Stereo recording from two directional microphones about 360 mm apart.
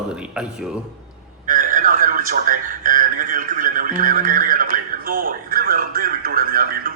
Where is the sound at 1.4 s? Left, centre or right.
Right.